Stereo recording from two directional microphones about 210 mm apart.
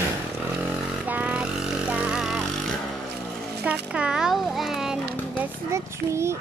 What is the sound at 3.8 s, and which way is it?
Music, 5° right (ahead or behind).